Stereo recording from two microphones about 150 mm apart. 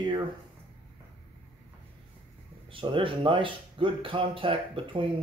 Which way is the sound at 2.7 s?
35° right (ahead or behind).